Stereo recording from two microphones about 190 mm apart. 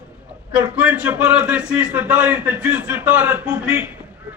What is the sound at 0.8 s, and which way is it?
A man's voice, 5° right (ahead or behind).